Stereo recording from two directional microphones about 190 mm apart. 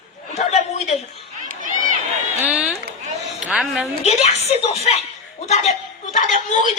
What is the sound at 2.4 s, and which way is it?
A woman's voice, 5° right (ahead or behind).